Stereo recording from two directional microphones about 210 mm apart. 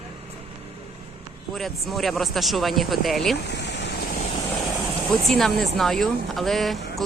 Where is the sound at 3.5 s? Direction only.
55° left (ahead or behind).